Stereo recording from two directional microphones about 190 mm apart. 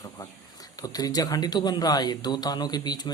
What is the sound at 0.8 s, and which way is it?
Speech, 20° left (ahead or behind).